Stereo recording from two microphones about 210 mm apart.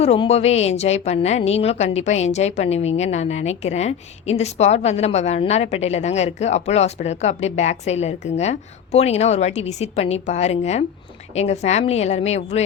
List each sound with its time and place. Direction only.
0.0 s a woman's voice: 30° left (ahead or behind)